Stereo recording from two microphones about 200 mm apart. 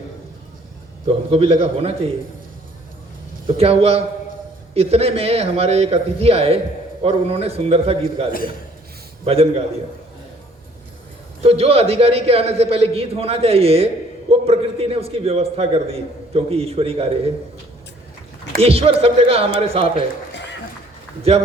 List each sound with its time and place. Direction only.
1.0 s a man's voice: 30° right (ahead or behind)
3.4 s a man's voice: 30° right (ahead or behind)
8.3 s a man's voice: 45° left (ahead or behind)
9.2 s a man's voice: 30° right (ahead or behind)
11.4 s a man's voice: 30° right (ahead or behind)
18.6 s a man's voice: 30° right (ahead or behind)